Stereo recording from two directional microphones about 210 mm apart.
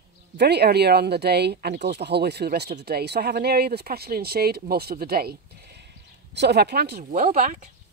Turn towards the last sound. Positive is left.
turn(degrees=-40)  # may be behind; listen again after turning